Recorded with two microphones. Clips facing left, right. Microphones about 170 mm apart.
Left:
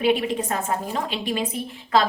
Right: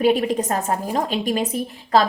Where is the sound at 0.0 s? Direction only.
40° right (ahead or behind).